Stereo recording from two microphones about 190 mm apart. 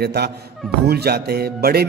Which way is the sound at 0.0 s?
55° right (ahead or behind).